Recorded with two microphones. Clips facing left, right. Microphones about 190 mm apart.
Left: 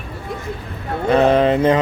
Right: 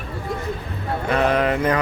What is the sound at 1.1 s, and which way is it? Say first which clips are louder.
Speech: left 6 dB; 30° left (ahead or behind).